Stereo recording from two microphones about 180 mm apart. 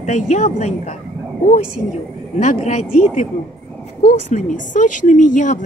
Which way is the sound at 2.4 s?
40° left (ahead or behind).